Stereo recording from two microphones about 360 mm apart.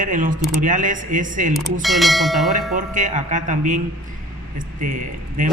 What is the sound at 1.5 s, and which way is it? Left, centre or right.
Church bell, centre.